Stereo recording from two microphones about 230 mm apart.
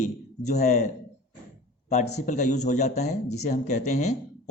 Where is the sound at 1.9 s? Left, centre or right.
Left.